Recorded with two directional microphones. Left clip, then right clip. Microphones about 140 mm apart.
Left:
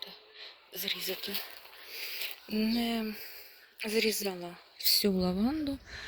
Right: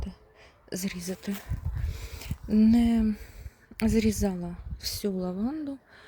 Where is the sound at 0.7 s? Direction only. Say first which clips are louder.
Left 1 dB; 20° right (ahead or behind).